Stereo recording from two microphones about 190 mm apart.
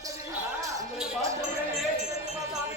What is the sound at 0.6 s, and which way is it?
Speech, 15° right (ahead or behind).